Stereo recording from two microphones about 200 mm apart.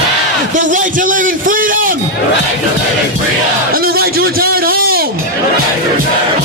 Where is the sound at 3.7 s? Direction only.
45° right (ahead or behind).